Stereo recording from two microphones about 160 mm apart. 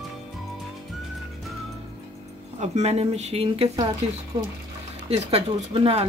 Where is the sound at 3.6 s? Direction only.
25° right (ahead or behind).